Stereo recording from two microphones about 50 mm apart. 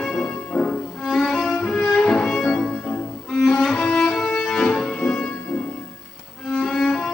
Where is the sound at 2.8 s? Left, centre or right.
Left.